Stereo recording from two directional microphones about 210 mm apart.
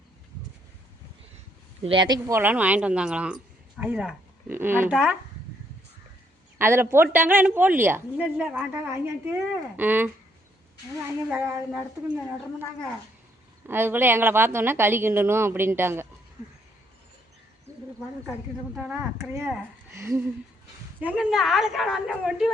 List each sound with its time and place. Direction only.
1.8 s a woman's voice: 25° right (ahead or behind)
6.6 s a woman's voice: 10° right (ahead or behind)
11.3 s a woman's voice: 5° right (ahead or behind)
13.7 s a woman's voice: 10° right (ahead or behind)
18.3 s a woman's voice: 5° right (ahead or behind)